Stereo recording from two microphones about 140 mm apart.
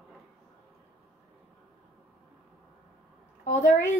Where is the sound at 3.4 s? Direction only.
60° left (ahead or behind).